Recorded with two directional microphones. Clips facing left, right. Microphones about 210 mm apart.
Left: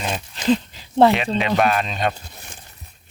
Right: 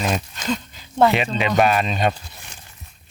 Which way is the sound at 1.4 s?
Centre (ahead or behind).